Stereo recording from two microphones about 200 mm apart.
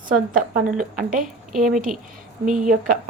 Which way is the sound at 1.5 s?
Centre (ahead or behind).